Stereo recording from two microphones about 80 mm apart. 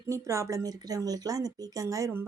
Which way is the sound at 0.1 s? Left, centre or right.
Right.